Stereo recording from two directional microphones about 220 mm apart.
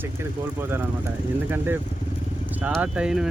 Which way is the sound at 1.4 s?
10° right (ahead or behind).